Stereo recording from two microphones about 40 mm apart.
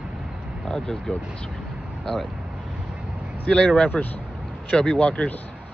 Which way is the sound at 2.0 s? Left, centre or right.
Centre.